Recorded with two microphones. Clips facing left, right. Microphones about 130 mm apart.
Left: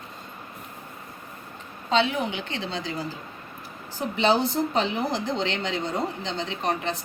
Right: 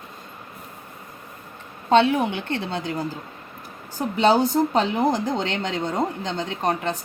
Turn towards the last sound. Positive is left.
turn(degrees=-45)  # may be behind; listen again after turning